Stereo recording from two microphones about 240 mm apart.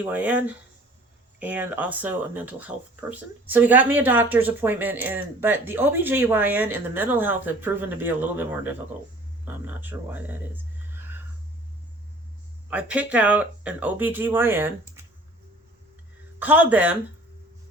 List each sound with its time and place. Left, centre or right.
0.0 s speech: centre
12.7 s speech: centre
16.4 s speech: centre